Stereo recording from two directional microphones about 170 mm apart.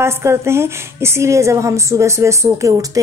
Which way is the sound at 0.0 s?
15° right (ahead or behind).